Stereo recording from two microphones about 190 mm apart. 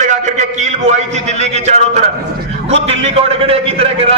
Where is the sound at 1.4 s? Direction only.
35° right (ahead or behind).